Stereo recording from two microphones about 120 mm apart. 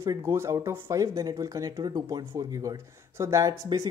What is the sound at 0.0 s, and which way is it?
Speech, 25° right (ahead or behind).